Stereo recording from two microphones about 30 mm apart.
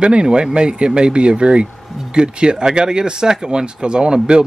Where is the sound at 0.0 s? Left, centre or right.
Right.